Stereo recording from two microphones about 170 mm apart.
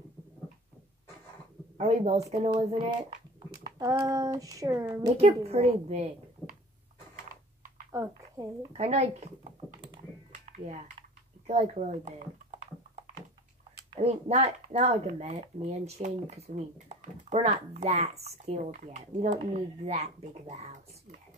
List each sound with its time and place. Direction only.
1.8 s speech: 40° right (ahead or behind)
3.6 s a child's voice: 20° right (ahead or behind)
5.1 s speech: 35° right (ahead or behind)
7.9 s a sound: 15° right (ahead or behind)
8.7 s computer keyboard: 40° right (ahead or behind)
11.0 s typing: 35° right (ahead or behind)
13.9 s speech: 40° right (ahead or behind)